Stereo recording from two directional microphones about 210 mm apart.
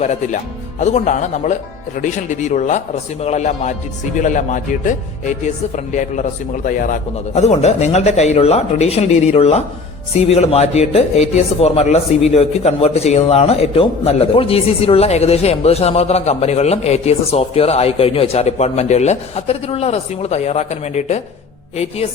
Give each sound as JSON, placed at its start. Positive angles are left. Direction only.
{"t": 0.0, "sound": "speech", "side_deg": 35}